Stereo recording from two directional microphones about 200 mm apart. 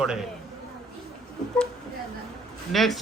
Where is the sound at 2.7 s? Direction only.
Centre (ahead or behind).